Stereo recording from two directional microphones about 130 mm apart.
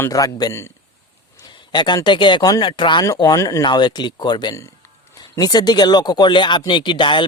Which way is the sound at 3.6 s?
35° left (ahead or behind).